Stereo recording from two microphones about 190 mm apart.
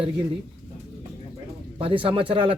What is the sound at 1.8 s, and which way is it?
Speech, 30° right (ahead or behind).